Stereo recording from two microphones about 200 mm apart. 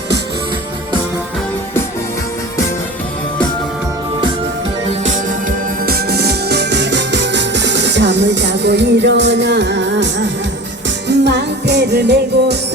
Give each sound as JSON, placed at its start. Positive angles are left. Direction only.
{"t": 5.0, "sound": "music", "side_deg": -45}